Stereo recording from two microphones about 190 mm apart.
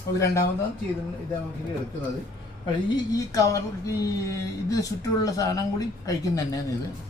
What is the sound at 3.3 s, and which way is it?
A woman's voice, 15° left (ahead or behind).